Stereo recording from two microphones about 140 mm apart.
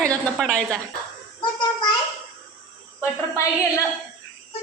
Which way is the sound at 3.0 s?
20° left (ahead or behind).